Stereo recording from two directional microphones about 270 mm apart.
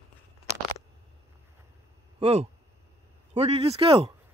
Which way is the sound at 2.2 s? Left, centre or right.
Right.